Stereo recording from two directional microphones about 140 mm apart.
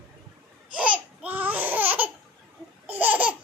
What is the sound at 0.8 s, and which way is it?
Laughter, 10° right (ahead or behind).